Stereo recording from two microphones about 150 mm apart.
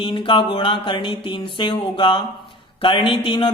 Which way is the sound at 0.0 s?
35° left (ahead or behind).